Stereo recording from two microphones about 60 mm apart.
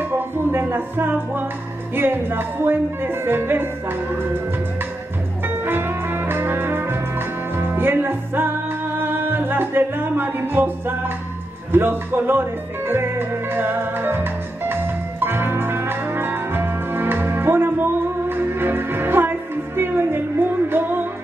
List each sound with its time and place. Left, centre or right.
0.0 s music: right
5.4 s music: right